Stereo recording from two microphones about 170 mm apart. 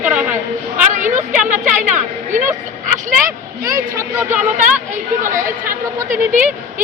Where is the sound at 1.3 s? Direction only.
45° right (ahead or behind).